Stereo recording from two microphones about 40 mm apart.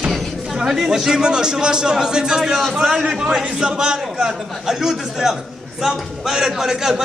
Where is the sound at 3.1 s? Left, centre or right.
Right.